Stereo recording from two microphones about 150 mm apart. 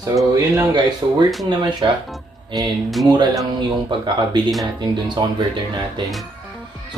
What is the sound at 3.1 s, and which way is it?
Speech, 25° right (ahead or behind).